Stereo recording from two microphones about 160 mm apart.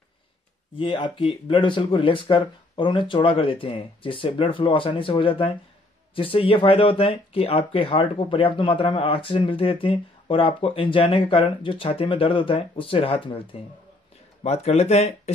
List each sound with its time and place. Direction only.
0.7 s speech: 30° left (ahead or behind)